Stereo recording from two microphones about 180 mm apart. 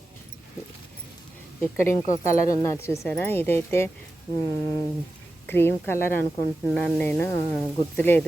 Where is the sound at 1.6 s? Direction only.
10° left (ahead or behind).